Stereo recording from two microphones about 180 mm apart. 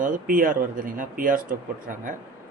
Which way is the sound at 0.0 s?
50° right (ahead or behind).